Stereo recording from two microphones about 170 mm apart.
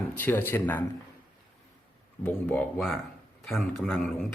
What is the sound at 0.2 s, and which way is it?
Speech, 15° left (ahead or behind).